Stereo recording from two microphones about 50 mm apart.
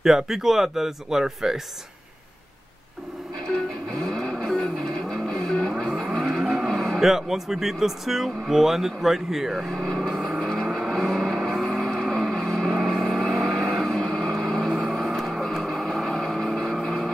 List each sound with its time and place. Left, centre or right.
0.0 s speech: centre
4.0 s vehicle: centre
6.4 s speech: centre
9.7 s speech: centre
10.4 s vehicle: centre